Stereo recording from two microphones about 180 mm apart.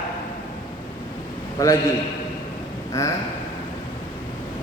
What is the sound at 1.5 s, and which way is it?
Speech, 20° left (ahead or behind).